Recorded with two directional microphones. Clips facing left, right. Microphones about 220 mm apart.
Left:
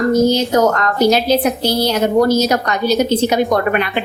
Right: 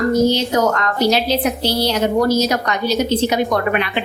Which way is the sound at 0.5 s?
45° left (ahead or behind).